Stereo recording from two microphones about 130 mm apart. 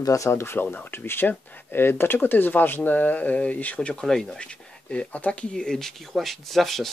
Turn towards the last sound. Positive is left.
turn(degrees=0)  # may be behind; listen again after turning